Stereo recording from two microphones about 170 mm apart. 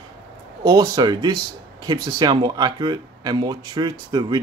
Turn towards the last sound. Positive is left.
turn(degrees=-25)  # may be behind; listen again after turning